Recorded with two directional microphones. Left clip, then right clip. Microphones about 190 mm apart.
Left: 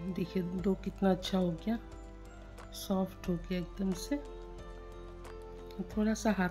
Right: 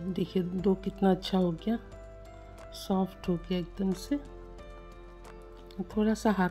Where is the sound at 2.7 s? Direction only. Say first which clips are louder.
Right 4 dB; 15° right (ahead or behind).